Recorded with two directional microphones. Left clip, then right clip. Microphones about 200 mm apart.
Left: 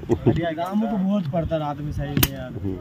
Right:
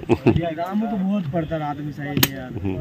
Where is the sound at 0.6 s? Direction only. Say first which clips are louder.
Even; 45° left (ahead or behind).